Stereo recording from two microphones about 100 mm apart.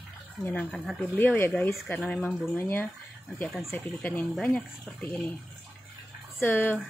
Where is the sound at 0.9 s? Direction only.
20° left (ahead or behind).